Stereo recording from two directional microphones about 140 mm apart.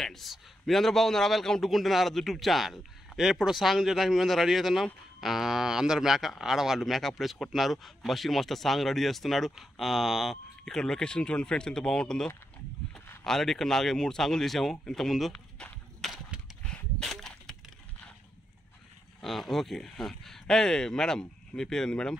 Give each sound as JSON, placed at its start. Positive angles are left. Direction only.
{"t": 0.0, "sound": "a man's voice", "side_deg": 0}
{"t": 16.7, "sound": "splinter", "side_deg": 5}
{"t": 19.2, "sound": "a man's voice", "side_deg": 0}